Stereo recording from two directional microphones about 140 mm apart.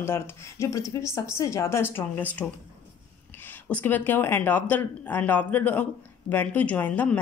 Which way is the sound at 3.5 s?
10° left (ahead or behind).